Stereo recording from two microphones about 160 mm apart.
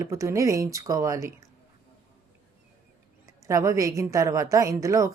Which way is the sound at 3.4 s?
20° right (ahead or behind).